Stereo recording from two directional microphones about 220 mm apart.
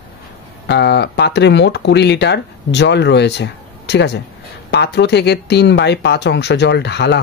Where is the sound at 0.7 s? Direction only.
50° left (ahead or behind).